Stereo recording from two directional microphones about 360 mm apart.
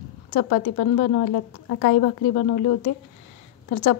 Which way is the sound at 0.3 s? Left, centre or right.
Left.